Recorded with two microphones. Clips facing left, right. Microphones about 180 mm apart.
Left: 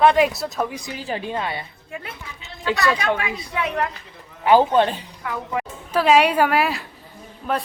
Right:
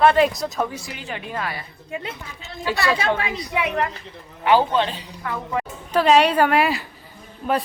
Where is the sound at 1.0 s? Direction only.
35° left (ahead or behind).